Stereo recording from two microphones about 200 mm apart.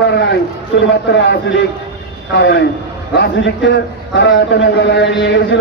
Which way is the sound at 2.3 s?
60° left (ahead or behind).